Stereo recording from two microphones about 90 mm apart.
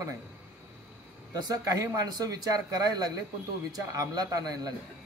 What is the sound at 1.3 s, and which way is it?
Speech, 40° right (ahead or behind).